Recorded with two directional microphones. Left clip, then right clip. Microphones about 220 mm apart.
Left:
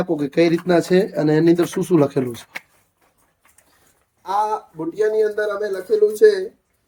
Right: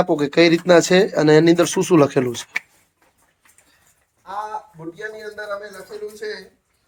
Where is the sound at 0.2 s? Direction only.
Centre (ahead or behind).